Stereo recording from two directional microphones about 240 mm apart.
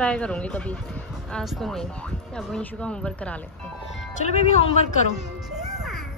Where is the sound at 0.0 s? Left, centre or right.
Centre.